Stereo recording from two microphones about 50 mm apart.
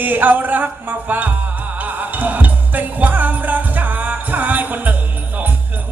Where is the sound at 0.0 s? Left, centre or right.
Right.